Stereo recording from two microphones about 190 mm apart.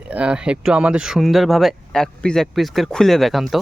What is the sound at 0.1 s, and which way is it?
Speech, 5° right (ahead or behind).